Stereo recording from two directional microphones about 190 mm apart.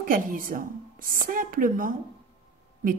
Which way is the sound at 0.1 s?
45° right (ahead or behind).